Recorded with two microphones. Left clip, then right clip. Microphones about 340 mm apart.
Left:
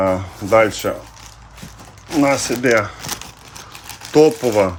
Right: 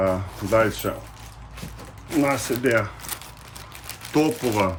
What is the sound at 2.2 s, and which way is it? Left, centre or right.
Speech, centre.